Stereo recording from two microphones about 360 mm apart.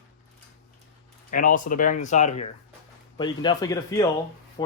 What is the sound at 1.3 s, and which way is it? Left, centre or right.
Speech, left.